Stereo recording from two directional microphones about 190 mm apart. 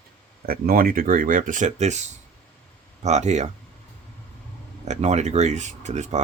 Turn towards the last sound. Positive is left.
turn(degrees=-40)  # may be behind; listen again after turning